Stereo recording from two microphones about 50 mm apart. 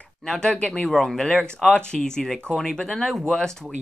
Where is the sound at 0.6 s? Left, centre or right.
Left.